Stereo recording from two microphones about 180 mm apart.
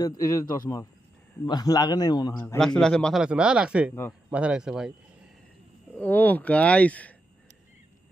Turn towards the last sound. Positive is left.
turn(degrees=10)  # may be behind; listen again after turning